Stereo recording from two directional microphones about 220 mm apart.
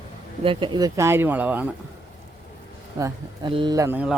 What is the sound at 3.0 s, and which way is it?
Speech, 20° right (ahead or behind).